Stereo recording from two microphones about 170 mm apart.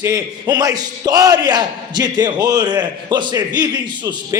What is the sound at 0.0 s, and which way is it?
A man's voice, 20° right (ahead or behind).